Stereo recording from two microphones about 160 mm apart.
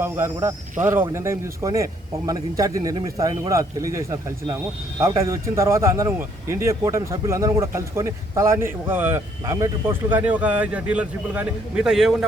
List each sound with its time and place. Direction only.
0.0 s a man's voice: 15° right (ahead or behind)